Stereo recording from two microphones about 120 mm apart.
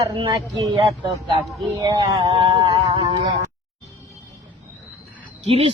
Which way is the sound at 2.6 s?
30° right (ahead or behind).